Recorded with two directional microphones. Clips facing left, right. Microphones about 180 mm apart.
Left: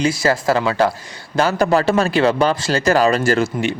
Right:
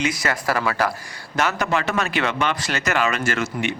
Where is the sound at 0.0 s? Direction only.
30° left (ahead or behind).